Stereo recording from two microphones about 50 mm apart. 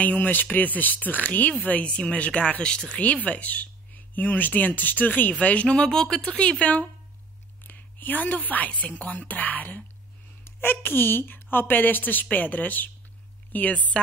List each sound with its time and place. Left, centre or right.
0.0 s speech: left; by 3.0 s centre
3.3 s speech: left; by 6.3 s centre
7.6 s a woman's voice: left
10.4 s a woman's voice: left